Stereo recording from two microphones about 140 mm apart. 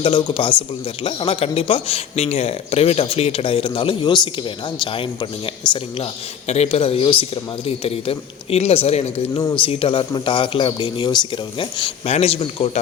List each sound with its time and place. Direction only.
0.0 s speech: 35° left (ahead or behind)
6.5 s speech: 45° left (ahead or behind)
12.0 s speech: 45° left (ahead or behind)